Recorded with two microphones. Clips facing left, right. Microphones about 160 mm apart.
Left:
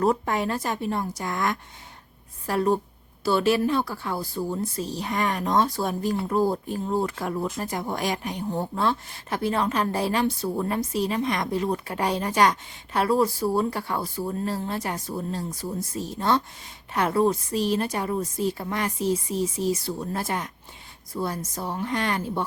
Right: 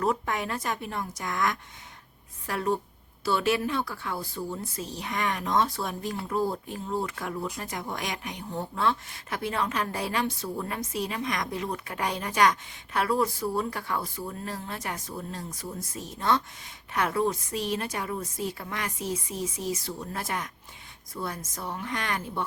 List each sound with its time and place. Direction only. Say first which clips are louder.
0.0 s speech: left 5 dB; 35° left (ahead or behind)